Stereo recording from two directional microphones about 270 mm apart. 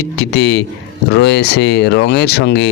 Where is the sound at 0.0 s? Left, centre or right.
Left.